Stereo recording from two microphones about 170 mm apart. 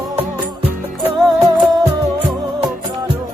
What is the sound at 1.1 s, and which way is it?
Music, centre (ahead or behind).